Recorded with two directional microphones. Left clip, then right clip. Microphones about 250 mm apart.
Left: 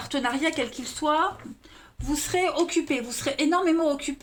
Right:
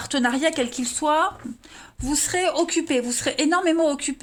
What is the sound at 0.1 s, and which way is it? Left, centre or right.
Speech, right.